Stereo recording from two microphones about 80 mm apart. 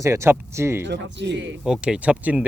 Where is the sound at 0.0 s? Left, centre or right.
Right.